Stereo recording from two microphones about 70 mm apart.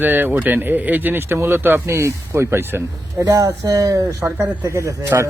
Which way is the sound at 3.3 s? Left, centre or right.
Right.